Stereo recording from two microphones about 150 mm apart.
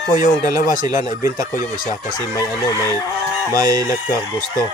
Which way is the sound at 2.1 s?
25° left (ahead or behind).